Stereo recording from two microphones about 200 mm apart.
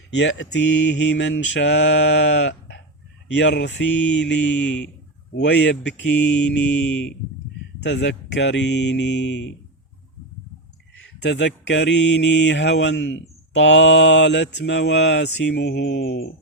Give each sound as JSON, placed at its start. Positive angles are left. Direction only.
{"t": 0.1, "sound": "mantra", "side_deg": 60}
{"t": 11.2, "sound": "mantra", "side_deg": 60}